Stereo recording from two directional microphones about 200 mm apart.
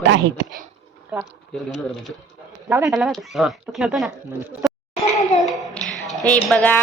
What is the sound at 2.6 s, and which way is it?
A child's voice, 5° right (ahead or behind).